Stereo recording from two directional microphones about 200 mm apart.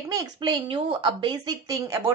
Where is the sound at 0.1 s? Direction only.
20° right (ahead or behind).